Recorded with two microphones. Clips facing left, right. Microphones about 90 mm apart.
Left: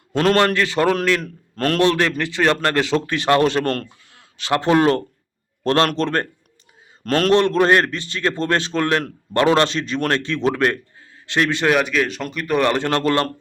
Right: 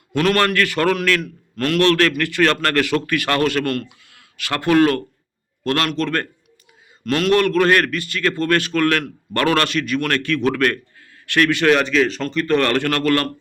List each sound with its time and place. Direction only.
0.1 s a man's voice: 25° left (ahead or behind)
1.2 s a man's voice: 35° left (ahead or behind)
1.8 s a man's voice: 15° left (ahead or behind); by 7.3 s 40° left (ahead or behind)
7.3 s a man's voice: 25° left (ahead or behind)
11.7 s speech: 5° left (ahead or behind); by 13.2 s 20° left (ahead or behind)